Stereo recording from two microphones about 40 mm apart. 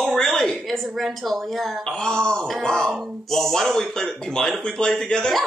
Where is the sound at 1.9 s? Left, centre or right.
Left.